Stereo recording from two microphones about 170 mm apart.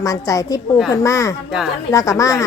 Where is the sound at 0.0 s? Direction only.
20° left (ahead or behind).